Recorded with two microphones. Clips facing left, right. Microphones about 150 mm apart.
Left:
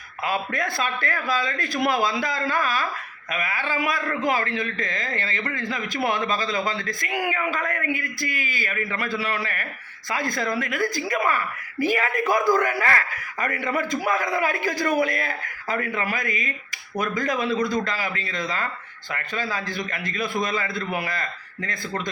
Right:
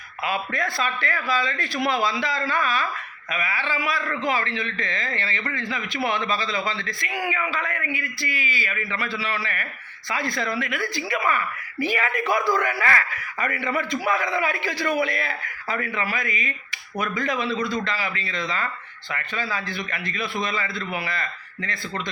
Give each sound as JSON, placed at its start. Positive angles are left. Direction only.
{"t": 0.3, "sound": "a man's voice", "side_deg": 45}